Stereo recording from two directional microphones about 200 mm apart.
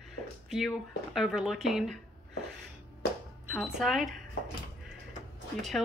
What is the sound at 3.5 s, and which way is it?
Speech, centre (ahead or behind).